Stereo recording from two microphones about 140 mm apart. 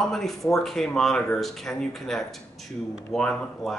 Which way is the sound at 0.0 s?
Centre (ahead or behind).